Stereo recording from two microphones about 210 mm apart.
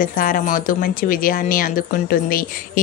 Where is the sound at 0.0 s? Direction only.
40° left (ahead or behind).